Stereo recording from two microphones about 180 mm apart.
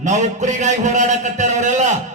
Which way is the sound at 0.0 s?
40° right (ahead or behind).